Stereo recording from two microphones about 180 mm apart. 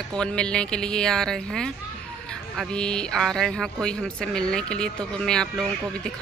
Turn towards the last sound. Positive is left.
turn(degrees=5)  # may be behind; listen again after turning